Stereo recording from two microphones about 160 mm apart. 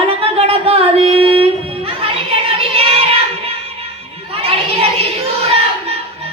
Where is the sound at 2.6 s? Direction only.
35° right (ahead or behind).